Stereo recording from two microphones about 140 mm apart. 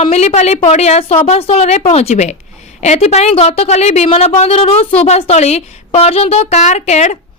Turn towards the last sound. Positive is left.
turn(degrees=55)  # may be behind; listen again after turning